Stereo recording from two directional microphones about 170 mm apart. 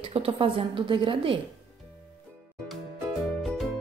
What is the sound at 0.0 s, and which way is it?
A woman's voice, 30° right (ahead or behind).